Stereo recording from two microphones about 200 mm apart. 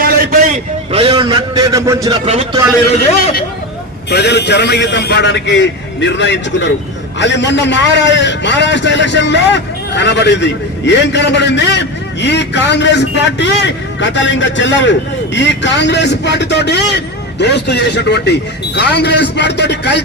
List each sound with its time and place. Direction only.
0.9 s a man's voice: 30° right (ahead or behind)
2.2 s a man's voice: 30° right (ahead or behind)
4.1 s a man's voice: 55° left (ahead or behind)